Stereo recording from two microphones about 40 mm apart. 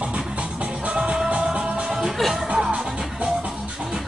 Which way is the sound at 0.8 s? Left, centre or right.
Right.